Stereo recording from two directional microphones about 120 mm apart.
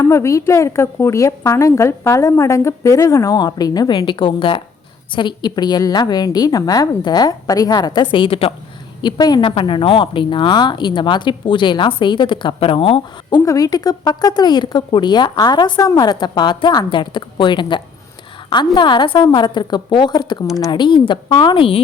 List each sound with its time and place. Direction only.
0.0 s a woman's voice: 25° left (ahead or behind)
8.1 s speech: 50° left (ahead or behind)
9.0 s a woman's voice: 35° left (ahead or behind)
9.4 s speech: 45° left (ahead or behind)
13.4 s a woman's voice: 30° left (ahead or behind); by 21.8 s 45° left (ahead or behind)